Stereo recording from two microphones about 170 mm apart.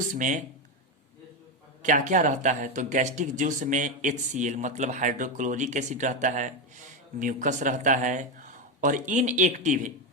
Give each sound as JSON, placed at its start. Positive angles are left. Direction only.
{"t": 0.1, "sound": "speech", "side_deg": -50}
{"t": 1.8, "sound": "speech", "side_deg": -50}